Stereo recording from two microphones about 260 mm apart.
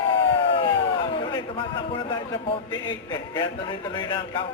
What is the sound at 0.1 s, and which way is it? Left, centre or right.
Crowd, centre.